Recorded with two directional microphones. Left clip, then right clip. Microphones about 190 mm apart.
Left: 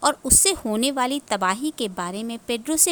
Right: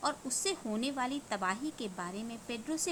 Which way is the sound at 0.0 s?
60° left (ahead or behind).